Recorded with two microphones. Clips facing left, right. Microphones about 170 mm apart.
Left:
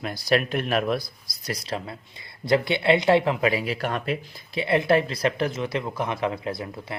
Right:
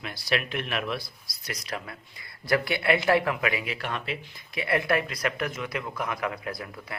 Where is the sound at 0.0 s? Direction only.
40° left (ahead or behind).